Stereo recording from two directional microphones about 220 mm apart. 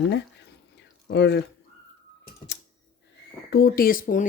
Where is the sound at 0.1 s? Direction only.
50° left (ahead or behind).